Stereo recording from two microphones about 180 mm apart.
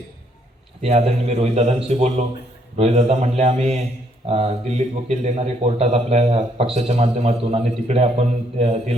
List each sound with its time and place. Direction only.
0.8 s speech: 35° right (ahead or behind)